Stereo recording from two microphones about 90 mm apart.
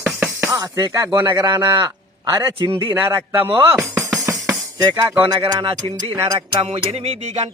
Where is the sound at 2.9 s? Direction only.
30° right (ahead or behind).